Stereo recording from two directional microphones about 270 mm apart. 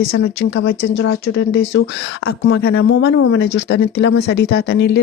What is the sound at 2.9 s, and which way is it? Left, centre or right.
Speech, left.